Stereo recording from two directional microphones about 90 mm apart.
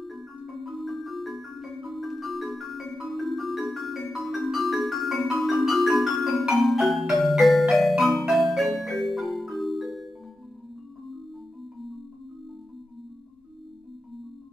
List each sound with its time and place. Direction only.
0.0 s music: centre (ahead or behind)